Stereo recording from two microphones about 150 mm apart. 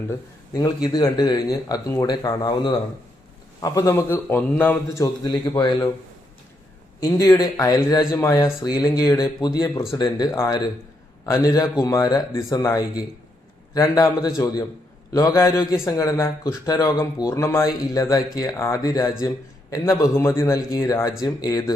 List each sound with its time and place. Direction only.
0.1 s a man's voice: 25° left (ahead or behind)
5.0 s speech: 25° left (ahead or behind)
7.0 s speech: 25° left (ahead or behind)